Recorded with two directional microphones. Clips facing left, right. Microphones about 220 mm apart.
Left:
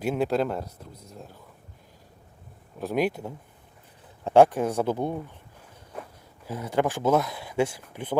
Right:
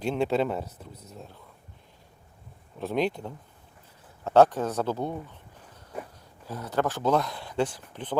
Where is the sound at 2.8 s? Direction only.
5° left (ahead or behind).